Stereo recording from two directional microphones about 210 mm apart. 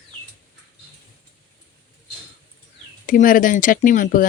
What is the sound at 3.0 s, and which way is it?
Speech, 40° left (ahead or behind).